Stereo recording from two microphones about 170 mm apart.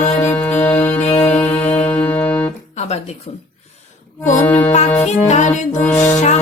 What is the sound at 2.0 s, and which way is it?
Music, 10° left (ahead or behind).